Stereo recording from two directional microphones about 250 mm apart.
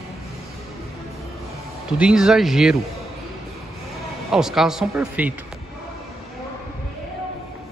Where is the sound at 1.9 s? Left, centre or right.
Centre.